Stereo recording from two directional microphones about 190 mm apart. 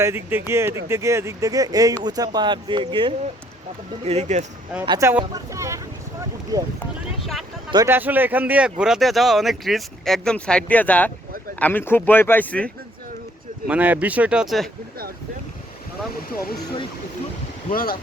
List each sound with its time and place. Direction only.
0.0 s speech: 10° right (ahead or behind); by 4.4 s 35° right (ahead or behind)
4.9 s speech: 15° right (ahead or behind)
7.7 s speech: 15° right (ahead or behind); by 12.7 s 5° left (ahead or behind)
13.7 s speech: 10° right (ahead or behind)
17.7 s speech: 50° left (ahead or behind)